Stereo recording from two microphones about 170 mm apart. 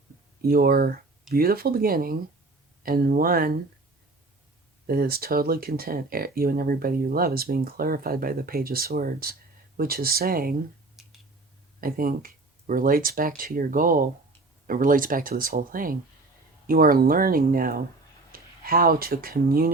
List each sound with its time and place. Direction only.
0.4 s speech: 60° right (ahead or behind)
4.9 s speech: 60° right (ahead or behind)
11.0 s clicking: centre (ahead or behind)
11.8 s speech: 60° right (ahead or behind)